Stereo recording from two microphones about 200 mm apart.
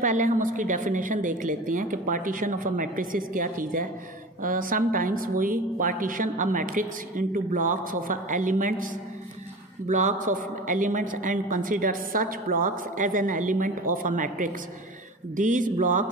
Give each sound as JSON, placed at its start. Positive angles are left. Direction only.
{"t": 0.0, "sound": "a woman's voice", "side_deg": -40}